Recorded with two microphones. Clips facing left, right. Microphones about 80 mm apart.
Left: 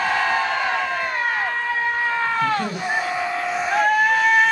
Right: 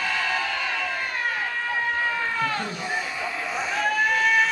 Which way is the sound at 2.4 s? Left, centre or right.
Left.